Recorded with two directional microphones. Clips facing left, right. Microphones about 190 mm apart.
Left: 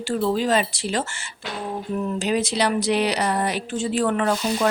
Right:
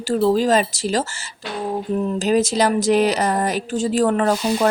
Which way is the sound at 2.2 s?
45° right (ahead or behind).